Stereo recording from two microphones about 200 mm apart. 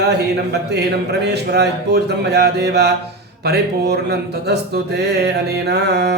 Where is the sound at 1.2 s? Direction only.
55° right (ahead or behind).